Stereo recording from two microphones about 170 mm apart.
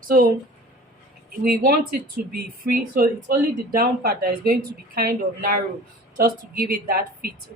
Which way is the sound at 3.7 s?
60° right (ahead or behind).